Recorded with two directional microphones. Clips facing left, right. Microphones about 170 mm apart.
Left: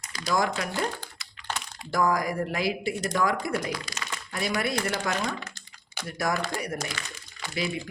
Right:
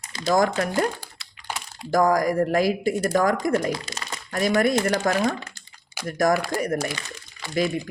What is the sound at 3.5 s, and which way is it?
Speech, 25° right (ahead or behind).